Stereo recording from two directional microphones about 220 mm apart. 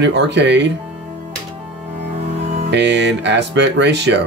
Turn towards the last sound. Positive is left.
turn(degrees=-50)  # may be behind; listen again after turning